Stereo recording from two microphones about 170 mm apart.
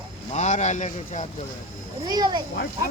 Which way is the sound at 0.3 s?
45° left (ahead or behind).